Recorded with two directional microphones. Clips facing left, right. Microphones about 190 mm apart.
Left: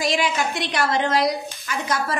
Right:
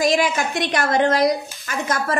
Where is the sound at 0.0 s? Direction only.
50° right (ahead or behind).